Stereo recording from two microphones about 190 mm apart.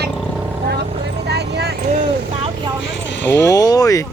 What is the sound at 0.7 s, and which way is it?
Vehicle, 60° right (ahead or behind).